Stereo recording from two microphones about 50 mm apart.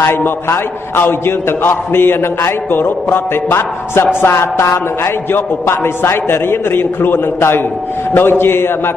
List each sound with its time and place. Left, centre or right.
0.0 s a man's voice: left
4.3 s a man's voice: left